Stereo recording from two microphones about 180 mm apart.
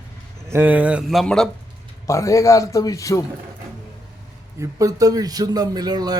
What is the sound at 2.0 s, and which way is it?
A man's voice, 15° left (ahead or behind).